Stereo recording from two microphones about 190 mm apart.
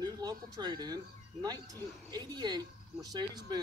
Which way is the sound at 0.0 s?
20° right (ahead or behind).